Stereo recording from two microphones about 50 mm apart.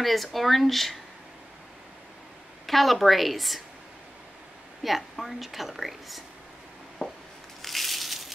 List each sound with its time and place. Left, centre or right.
0.0 s a woman's voice: centre
2.6 s a woman's voice: centre
4.8 s a woman's voice: centre
7.0 s a sound: centre
7.6 s crushing: centre